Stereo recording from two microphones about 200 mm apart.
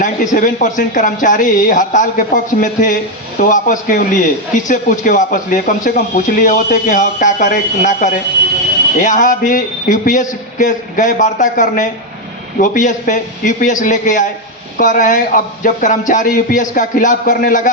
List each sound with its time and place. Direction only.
0.0 s speech: 40° left (ahead or behind)